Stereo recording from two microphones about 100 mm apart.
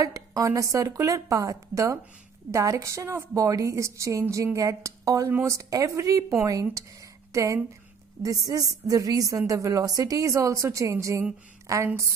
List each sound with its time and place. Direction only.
0.0 s a woman's voice: 35° right (ahead or behind)